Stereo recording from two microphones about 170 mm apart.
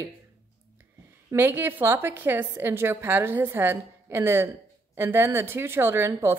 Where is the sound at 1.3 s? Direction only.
10° right (ahead or behind).